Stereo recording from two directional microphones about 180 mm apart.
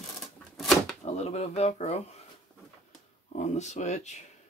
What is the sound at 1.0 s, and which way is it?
Speech, 35° left (ahead or behind).